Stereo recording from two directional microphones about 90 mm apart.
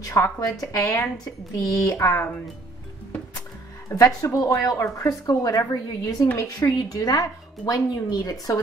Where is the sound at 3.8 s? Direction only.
35° left (ahead or behind).